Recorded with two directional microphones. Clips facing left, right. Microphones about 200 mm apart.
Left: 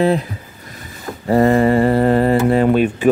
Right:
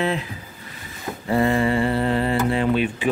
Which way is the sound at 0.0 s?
40° left (ahead or behind).